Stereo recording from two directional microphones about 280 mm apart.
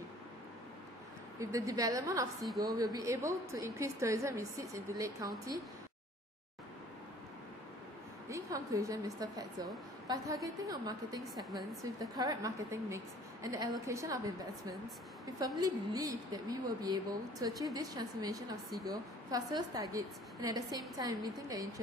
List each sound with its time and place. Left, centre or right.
1.4 s a woman's voice: centre
8.3 s a woman's voice: centre